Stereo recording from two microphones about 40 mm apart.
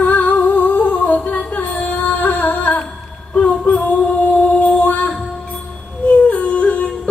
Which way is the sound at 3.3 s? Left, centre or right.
Left.